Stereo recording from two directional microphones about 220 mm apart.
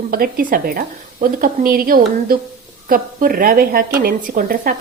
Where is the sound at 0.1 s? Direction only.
40° right (ahead or behind).